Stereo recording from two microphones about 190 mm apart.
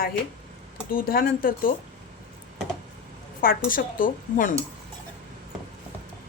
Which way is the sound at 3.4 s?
50° left (ahead or behind).